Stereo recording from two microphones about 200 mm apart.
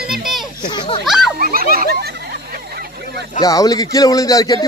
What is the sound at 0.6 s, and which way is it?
Speech, 25° left (ahead or behind).